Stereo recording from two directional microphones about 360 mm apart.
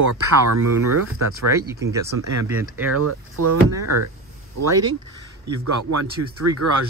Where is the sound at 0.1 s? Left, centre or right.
Right.